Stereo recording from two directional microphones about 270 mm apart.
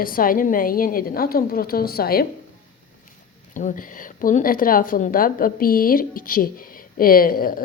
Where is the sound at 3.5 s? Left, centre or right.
Left.